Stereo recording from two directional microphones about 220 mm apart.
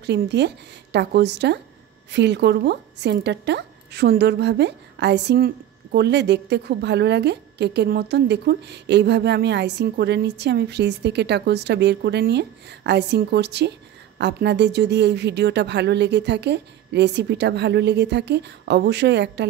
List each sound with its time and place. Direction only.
0.0 s a woman's voice: 50° right (ahead or behind)